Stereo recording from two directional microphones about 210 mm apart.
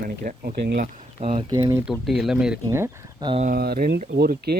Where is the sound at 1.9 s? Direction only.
Centre (ahead or behind).